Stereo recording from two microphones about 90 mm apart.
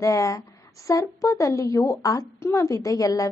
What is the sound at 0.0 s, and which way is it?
A woman's voice, 35° left (ahead or behind).